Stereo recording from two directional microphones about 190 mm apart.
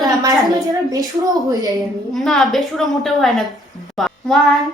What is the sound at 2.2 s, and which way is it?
A woman's voice, centre (ahead or behind).